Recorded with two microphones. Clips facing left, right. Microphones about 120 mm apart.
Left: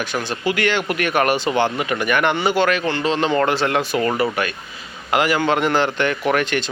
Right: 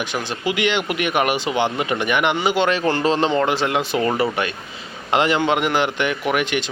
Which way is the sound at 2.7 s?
40° right (ahead or behind).